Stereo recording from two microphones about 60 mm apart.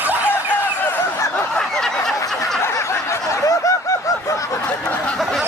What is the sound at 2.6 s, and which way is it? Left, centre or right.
Snicker, left.